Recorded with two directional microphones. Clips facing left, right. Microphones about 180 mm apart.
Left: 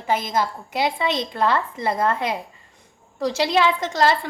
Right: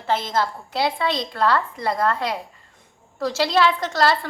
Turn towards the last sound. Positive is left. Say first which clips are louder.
# left 1 dB
turn(degrees=15)  # may be behind; listen again after turning